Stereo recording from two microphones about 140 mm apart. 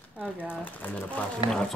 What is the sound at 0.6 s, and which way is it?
Speech, 10° left (ahead or behind).